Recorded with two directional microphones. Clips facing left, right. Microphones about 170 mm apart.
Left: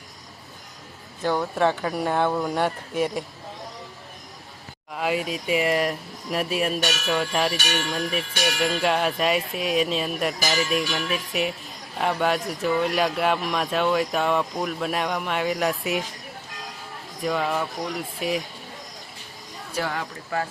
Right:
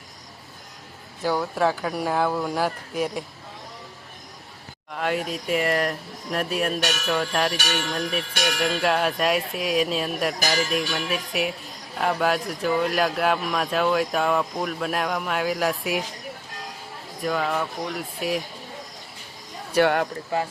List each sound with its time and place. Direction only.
1.2 s speech: 5° right (ahead or behind)
4.9 s speech: 5° left (ahead or behind)
17.2 s speech: centre (ahead or behind)
19.7 s speech: 65° right (ahead or behind)